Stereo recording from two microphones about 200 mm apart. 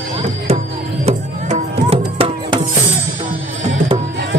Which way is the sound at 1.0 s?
35° right (ahead or behind).